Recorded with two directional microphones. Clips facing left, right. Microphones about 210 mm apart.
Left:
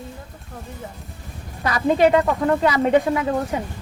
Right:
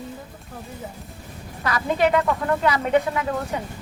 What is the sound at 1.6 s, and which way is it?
Speech, 30° left (ahead or behind).